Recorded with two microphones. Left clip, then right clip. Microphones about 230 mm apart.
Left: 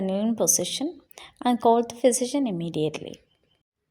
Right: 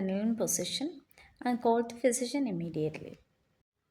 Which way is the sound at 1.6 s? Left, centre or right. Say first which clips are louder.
Left 8 dB; left.